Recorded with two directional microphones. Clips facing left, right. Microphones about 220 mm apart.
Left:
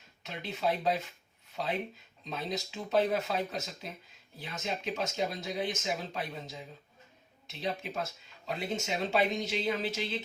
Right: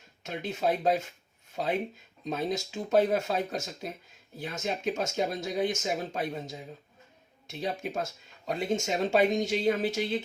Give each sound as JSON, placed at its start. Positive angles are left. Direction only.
{"t": 0.2, "sound": "speech", "side_deg": -45}